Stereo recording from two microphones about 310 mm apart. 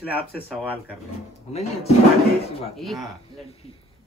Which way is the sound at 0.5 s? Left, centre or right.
Centre.